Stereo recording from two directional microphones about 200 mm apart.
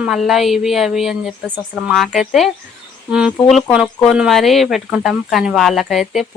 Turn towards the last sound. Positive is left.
turn(degrees=0)  # may be behind; listen again after turning